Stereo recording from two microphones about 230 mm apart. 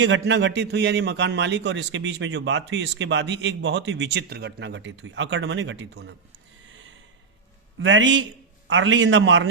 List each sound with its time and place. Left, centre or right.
0.0 s a man's voice: right
7.8 s a man's voice: right